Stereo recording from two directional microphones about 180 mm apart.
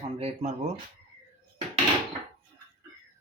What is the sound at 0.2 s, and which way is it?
Speech, 35° right (ahead or behind).